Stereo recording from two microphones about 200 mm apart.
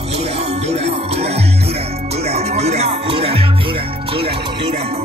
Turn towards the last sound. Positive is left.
turn(degrees=-30)  # may be behind; listen again after turning